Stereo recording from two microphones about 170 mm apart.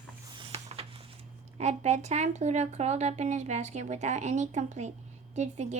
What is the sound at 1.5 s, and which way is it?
Speech, 45° right (ahead or behind).